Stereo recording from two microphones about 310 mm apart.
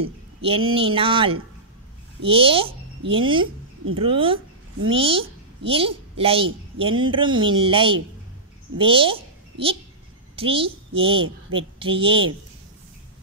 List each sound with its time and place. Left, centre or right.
0.0 s a woman's voice: centre